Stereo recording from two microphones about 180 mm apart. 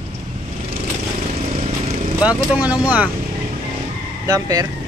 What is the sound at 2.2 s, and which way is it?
Speech, 5° right (ahead or behind).